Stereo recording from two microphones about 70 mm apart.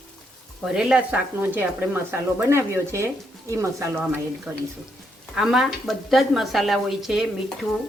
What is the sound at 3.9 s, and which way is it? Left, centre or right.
Speech, right.